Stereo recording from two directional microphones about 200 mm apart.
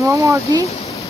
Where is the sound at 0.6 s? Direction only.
30° left (ahead or behind).